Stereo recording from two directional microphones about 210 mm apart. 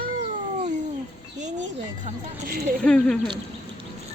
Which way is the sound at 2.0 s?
35° right (ahead or behind).